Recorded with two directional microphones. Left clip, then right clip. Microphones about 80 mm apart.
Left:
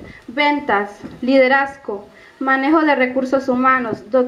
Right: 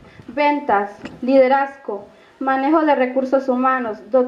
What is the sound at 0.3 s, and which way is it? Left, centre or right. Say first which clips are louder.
A woman's voice: even; left.